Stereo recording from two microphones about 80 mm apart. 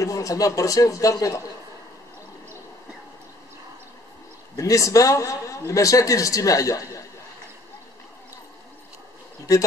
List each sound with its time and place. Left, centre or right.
0.0 s a sound: left
0.6 s speech: left
4.6 s speech: left
9.5 s speech: left